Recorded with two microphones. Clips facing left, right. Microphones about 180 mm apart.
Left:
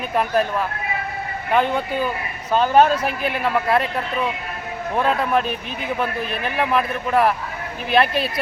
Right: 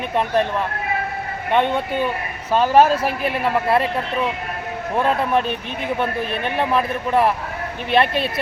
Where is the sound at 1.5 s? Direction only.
Centre (ahead or behind).